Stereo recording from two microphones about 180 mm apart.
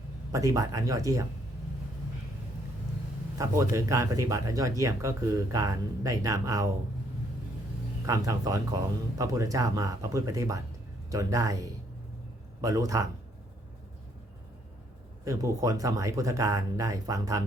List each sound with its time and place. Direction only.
0.3 s speech: 20° right (ahead or behind)
3.3 s speech: 20° right (ahead or behind)
8.0 s speech: 20° right (ahead or behind)
15.2 s speech: 20° right (ahead or behind)